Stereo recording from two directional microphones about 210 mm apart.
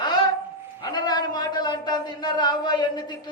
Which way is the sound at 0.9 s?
20° left (ahead or behind).